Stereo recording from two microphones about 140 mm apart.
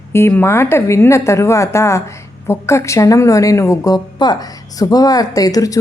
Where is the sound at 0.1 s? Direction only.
15° left (ahead or behind).